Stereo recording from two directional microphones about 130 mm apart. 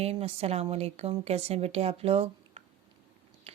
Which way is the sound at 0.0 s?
50° right (ahead or behind).